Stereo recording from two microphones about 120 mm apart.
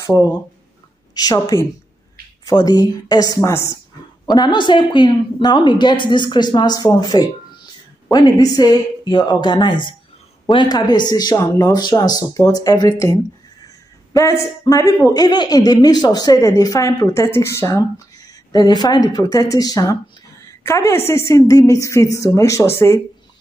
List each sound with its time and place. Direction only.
1.1 s a man's voice: 35° left (ahead or behind)
4.3 s a man's voice: 40° left (ahead or behind); by 22.9 s 20° left (ahead or behind)